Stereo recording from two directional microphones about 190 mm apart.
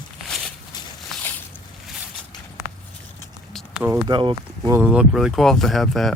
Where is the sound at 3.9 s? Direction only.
25° right (ahead or behind).